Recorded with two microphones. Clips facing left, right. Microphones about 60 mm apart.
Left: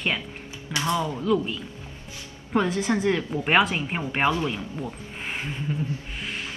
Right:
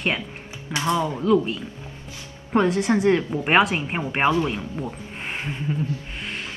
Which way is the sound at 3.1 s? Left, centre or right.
Centre.